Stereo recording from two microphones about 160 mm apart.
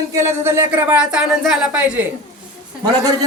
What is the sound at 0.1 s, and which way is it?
Speech, 15° right (ahead or behind).